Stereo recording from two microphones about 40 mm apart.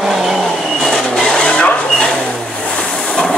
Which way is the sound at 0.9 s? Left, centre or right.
Centre.